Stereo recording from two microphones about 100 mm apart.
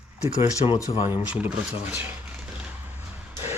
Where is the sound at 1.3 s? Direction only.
15° right (ahead or behind).